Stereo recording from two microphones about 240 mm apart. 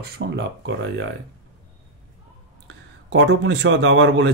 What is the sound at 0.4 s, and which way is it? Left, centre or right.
Speech, right.